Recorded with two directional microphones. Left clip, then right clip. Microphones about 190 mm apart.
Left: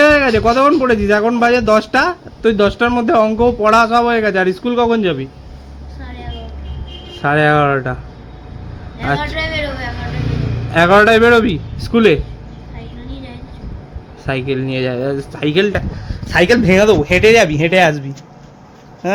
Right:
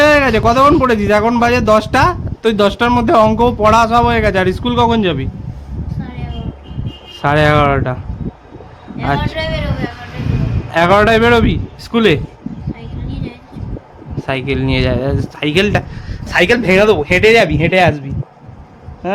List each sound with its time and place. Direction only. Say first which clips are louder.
0.0 s speech: even; 10° right (ahead or behind)
7.2 s speech: right 1 dB; 10° right (ahead or behind)
9.0 s a man's voice: right 1 dB; 15° right (ahead or behind)
10.7 s speech: left 1 dB; 10° right (ahead or behind)
14.3 s speech: right 1 dB; 10° right (ahead or behind)